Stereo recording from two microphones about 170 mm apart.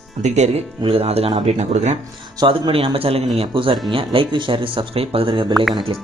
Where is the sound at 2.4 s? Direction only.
30° right (ahead or behind).